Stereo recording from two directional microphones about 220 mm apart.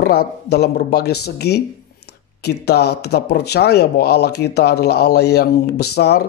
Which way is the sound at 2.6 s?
45° left (ahead or behind).